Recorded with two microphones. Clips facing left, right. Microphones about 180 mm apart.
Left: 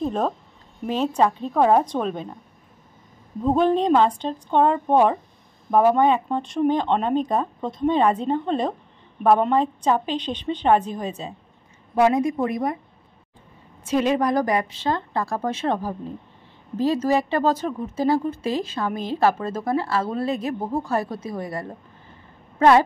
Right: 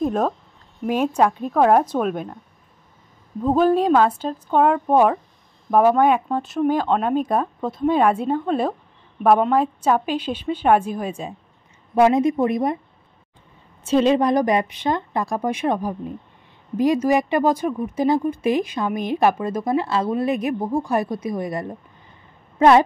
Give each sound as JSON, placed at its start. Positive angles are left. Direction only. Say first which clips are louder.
{"t": 0.0, "sound": "a sound", "louder": "right 3 dB", "side_deg": -5}
{"t": 0.8, "sound": "speech", "louder": "right 2 dB", "side_deg": -10}
{"t": 3.4, "sound": "a woman's voice", "louder": "right 2 dB", "side_deg": -5}
{"t": 13.8, "sound": "a woman's voice", "louder": "right 4 dB", "side_deg": -25}